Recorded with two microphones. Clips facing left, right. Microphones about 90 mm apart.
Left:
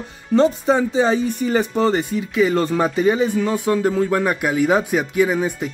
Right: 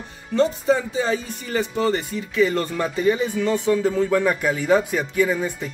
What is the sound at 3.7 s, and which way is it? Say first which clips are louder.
Speech: left 2 dB; 60° left (ahead or behind).